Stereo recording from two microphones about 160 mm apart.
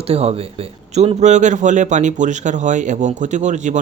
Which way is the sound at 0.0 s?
40° right (ahead or behind).